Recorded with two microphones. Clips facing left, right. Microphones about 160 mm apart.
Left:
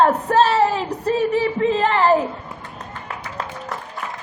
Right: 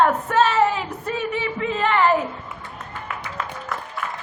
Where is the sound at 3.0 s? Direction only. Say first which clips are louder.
Even; 35° left (ahead or behind).